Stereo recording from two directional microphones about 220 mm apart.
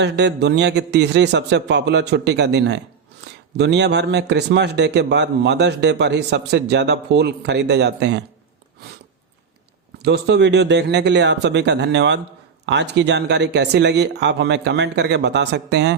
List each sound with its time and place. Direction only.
0.0 s a man's voice: 50° right (ahead or behind)
10.0 s a man's voice: 50° right (ahead or behind)